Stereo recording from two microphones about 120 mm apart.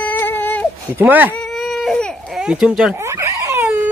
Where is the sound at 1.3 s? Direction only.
Centre (ahead or behind).